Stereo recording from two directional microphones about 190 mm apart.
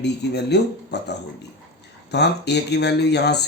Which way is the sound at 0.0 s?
60° left (ahead or behind).